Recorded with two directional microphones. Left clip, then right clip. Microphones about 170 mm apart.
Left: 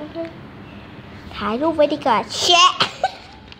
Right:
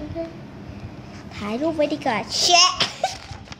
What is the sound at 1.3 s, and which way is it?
A child's voice, 15° left (ahead or behind).